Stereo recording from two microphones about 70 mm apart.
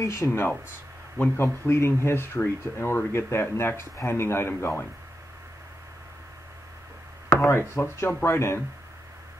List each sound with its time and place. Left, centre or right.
0.0 s speech: left
1.1 s speech: left
1.7 s speech: left
7.4 s speech: left